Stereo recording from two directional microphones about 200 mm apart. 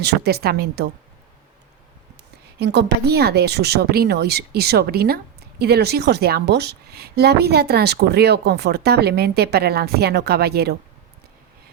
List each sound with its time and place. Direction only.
0.0 s speech: 55° right (ahead or behind)
2.6 s speech: 55° right (ahead or behind)